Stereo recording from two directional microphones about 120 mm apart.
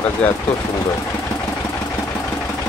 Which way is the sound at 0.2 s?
10° left (ahead or behind).